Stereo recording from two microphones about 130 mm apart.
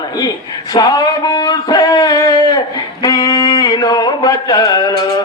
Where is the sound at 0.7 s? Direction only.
30° left (ahead or behind).